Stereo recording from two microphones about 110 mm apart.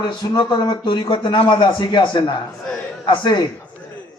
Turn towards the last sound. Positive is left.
turn(degrees=45)  # may be behind; listen again after turning